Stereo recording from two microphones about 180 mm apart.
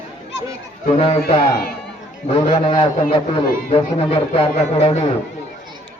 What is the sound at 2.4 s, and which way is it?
A man's voice, 25° left (ahead or behind).